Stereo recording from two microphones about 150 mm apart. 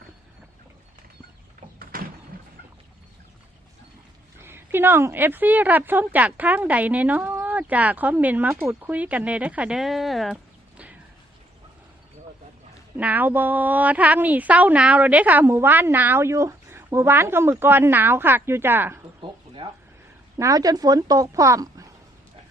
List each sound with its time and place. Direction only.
1.8 s a sound: 75° right (ahead or behind)
4.4 s a woman's voice: 15° right (ahead or behind)
13.0 s a woman's voice: 10° right (ahead or behind)
20.4 s speech: 25° right (ahead or behind)